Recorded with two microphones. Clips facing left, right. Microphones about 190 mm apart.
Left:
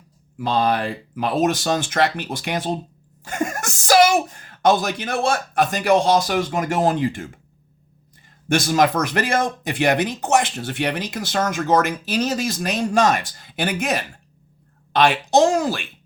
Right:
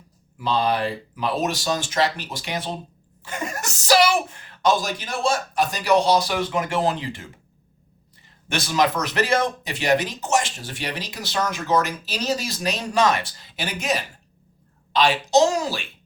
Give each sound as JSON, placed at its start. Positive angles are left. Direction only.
{"t": 0.3, "sound": "speech", "side_deg": 50}
{"t": 8.4, "sound": "speech", "side_deg": 45}